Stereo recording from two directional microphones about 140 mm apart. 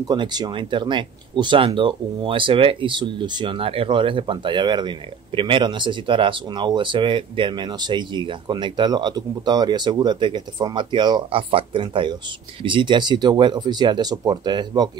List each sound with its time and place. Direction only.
0.1 s speech: 30° right (ahead or behind)